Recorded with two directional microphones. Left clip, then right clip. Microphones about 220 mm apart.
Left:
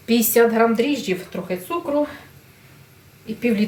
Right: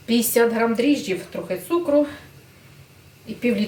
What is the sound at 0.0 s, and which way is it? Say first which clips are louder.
A woman's voice: left 2 dB; 25° left (ahead or behind).